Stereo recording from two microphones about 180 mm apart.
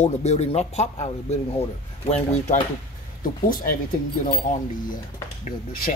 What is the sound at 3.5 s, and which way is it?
Speech, 50° left (ahead or behind).